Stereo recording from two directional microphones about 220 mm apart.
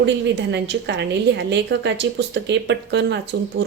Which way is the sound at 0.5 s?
50° right (ahead or behind).